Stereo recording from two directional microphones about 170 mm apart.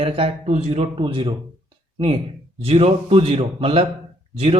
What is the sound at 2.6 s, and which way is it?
Speech, 35° right (ahead or behind).